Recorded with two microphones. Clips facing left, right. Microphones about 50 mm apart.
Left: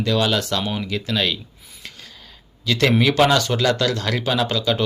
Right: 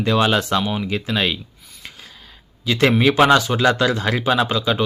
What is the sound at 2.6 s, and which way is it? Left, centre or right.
Speech, centre.